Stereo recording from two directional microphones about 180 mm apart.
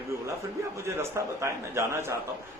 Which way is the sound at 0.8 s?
15° right (ahead or behind).